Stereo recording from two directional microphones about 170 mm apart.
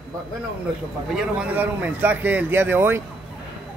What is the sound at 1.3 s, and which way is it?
Speech, 10° right (ahead or behind).